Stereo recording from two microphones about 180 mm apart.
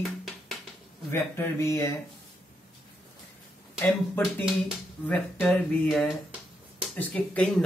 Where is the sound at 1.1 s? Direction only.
15° left (ahead or behind).